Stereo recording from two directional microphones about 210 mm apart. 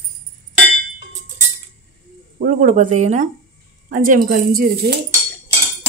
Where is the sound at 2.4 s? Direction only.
40° right (ahead or behind).